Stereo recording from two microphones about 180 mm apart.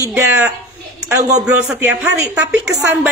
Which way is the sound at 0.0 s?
15° right (ahead or behind).